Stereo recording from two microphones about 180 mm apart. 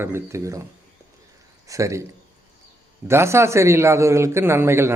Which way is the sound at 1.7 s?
15° right (ahead or behind).